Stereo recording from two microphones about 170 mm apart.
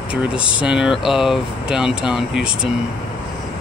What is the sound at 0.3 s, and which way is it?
Speech, 30° left (ahead or behind).